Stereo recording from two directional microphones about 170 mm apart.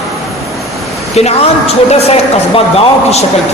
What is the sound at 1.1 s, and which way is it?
A woman's voice, 40° left (ahead or behind).